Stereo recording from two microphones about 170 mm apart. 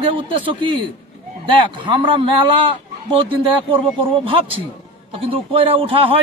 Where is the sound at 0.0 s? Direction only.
30° right (ahead or behind).